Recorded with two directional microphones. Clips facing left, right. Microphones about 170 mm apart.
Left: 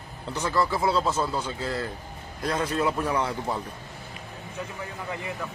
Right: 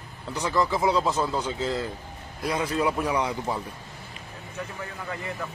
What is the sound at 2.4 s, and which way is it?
Speech, 5° right (ahead or behind).